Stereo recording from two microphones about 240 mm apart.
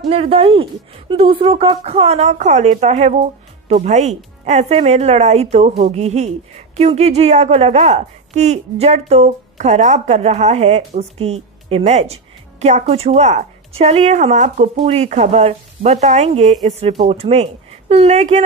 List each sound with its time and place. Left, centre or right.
0.1 s speech: right